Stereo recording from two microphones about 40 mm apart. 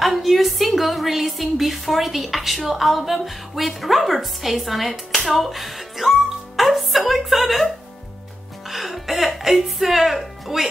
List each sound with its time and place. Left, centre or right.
0.0 s a woman's voice: centre
8.6 s music: centre